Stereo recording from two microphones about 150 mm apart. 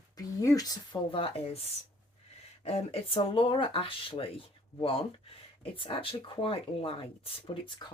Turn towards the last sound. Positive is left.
turn(degrees=35)  # may be behind; listen again after turning